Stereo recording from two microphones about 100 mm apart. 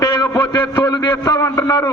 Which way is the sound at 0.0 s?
35° left (ahead or behind).